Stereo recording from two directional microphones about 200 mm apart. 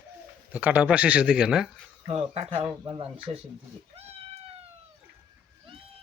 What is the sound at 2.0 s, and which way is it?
Speech, 30° right (ahead or behind).